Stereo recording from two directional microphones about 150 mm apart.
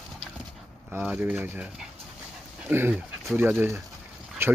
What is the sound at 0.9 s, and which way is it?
Speech, 15° right (ahead or behind).